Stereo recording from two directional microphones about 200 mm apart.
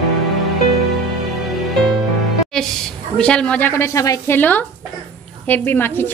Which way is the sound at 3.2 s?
5° left (ahead or behind).